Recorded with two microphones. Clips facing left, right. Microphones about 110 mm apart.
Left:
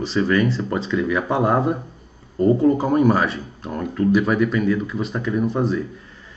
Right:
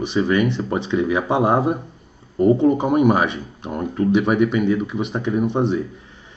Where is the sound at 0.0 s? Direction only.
15° right (ahead or behind).